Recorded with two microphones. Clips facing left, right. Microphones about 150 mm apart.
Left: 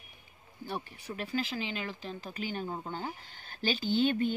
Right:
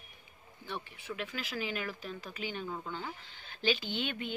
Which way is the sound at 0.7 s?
40° left (ahead or behind).